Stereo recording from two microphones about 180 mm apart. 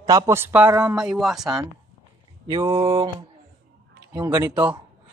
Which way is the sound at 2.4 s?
30° right (ahead or behind).